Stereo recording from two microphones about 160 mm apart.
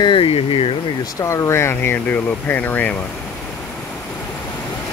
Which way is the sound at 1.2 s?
15° left (ahead or behind).